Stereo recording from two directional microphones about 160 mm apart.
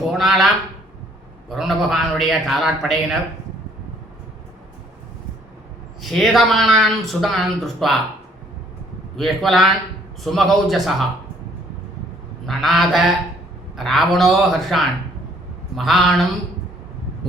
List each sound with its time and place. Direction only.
0.1 s speech: centre (ahead or behind)
6.0 s speech: centre (ahead or behind)
9.1 s speech: centre (ahead or behind)
12.5 s speech: centre (ahead or behind)